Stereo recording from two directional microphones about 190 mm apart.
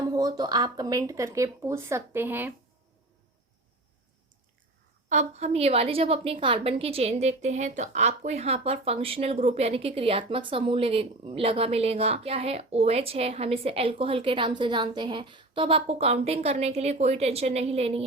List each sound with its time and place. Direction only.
0.0 s speech: 20° right (ahead or behind)
5.0 s a woman's voice: 35° right (ahead or behind)